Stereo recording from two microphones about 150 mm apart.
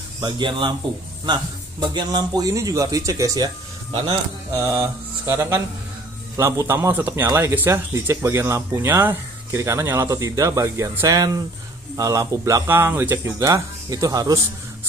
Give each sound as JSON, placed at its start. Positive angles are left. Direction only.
{"t": 0.2, "sound": "speech", "side_deg": -30}
{"t": 3.9, "sound": "speech", "side_deg": -30}
{"t": 5.2, "sound": "speech", "side_deg": -20}